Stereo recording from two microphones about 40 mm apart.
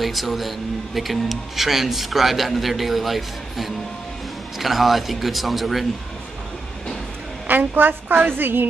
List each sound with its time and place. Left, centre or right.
0.0 s speech: centre
7.4 s a woman's voice: right